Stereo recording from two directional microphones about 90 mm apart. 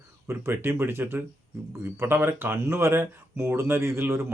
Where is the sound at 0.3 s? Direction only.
30° right (ahead or behind).